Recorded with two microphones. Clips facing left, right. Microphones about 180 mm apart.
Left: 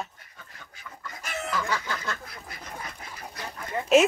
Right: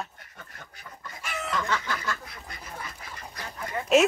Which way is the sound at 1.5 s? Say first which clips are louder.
Right 1 dB; 5° left (ahead or behind).